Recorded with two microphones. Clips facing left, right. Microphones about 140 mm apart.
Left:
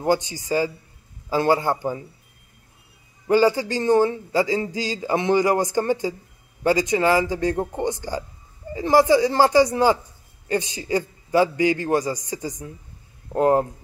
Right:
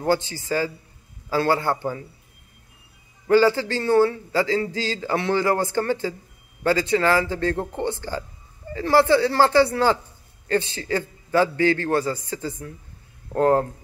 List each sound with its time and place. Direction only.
0.0 s a man's voice: 15° left (ahead or behind)
3.3 s a man's voice: 15° left (ahead or behind)